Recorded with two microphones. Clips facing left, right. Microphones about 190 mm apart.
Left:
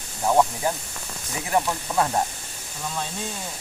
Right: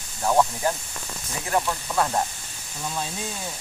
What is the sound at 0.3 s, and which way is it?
Speech, 10° left (ahead or behind).